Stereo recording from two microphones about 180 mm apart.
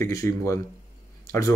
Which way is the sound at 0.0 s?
15° left (ahead or behind).